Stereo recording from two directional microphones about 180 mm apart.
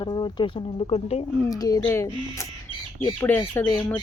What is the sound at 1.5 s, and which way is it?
Speech, 20° left (ahead or behind).